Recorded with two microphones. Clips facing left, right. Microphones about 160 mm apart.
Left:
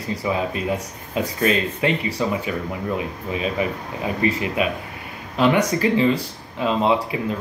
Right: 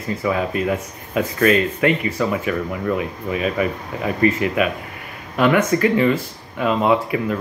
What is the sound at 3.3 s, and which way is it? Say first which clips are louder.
Speech: right 3 dB; 50° right (ahead or behind).